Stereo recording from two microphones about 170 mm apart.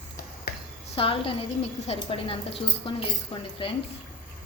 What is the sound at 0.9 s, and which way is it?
A woman's voice, 30° left (ahead or behind).